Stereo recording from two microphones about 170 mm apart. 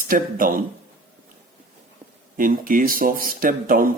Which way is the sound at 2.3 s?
55° right (ahead or behind).